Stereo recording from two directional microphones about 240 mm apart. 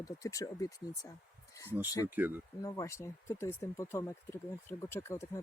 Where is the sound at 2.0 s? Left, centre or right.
Centre.